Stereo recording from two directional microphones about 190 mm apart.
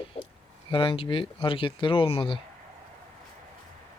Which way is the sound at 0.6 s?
25° left (ahead or behind).